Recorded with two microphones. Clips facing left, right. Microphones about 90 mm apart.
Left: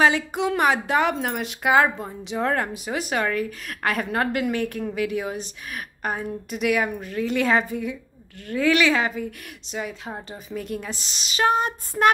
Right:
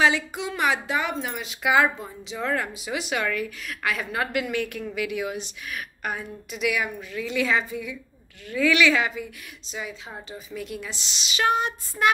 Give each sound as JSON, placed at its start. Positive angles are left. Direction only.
{"t": 0.0, "sound": "speech", "side_deg": 50}
{"t": 6.5, "sound": "speech", "side_deg": 45}
{"t": 10.1, "sound": "speech", "side_deg": 40}